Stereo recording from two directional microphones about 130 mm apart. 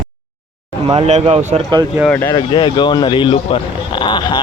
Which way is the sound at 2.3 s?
35° left (ahead or behind).